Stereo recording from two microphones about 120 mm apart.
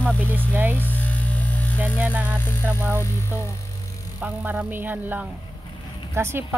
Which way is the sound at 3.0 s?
25° left (ahead or behind).